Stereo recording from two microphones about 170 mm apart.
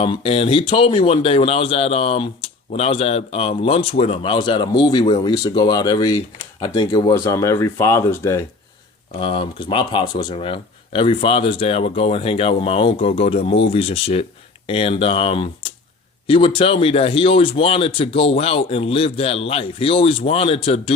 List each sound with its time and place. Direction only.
0.0 s speech: 35° left (ahead or behind); by 8.4 s 15° left (ahead or behind)
9.2 s speech: 30° left (ahead or behind)